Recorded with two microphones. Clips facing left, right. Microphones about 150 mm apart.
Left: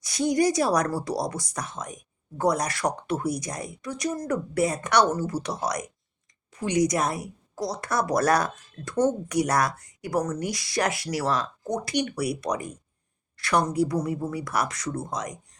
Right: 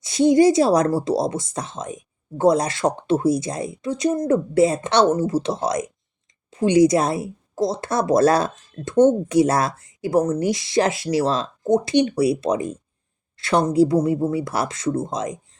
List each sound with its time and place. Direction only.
0.0 s speech: 25° right (ahead or behind)